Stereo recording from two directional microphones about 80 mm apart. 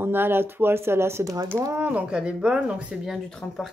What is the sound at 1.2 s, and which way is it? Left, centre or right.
Speech, right.